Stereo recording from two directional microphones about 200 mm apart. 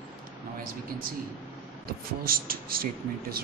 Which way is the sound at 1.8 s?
45° right (ahead or behind).